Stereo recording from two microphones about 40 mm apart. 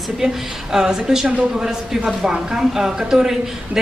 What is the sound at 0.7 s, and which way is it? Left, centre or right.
A woman's voice, centre.